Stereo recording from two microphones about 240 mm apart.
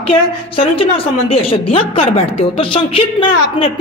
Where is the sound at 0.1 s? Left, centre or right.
Left.